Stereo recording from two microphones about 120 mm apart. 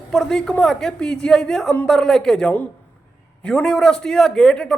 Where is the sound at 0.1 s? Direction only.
5° left (ahead or behind).